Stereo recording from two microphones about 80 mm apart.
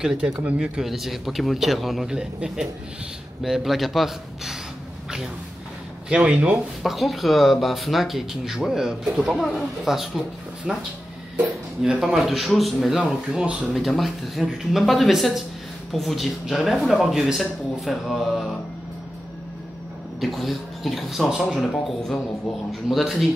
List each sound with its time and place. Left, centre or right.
0.0 s a man's voice: centre
6.0 s speech: centre
6.8 s a man's voice: centre
13.7 s a man's voice: centre
20.2 s a man's voice: centre